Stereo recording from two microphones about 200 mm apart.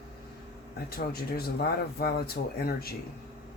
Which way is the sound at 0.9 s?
50° left (ahead or behind).